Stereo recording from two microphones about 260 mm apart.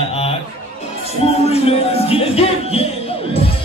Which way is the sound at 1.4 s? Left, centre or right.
Left.